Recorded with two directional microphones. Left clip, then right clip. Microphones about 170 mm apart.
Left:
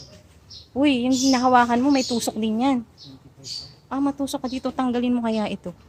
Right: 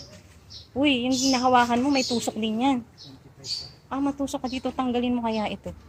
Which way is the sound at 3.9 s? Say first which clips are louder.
Left 3 dB; 25° left (ahead or behind).